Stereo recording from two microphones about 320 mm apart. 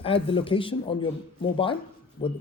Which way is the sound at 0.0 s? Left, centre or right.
Centre.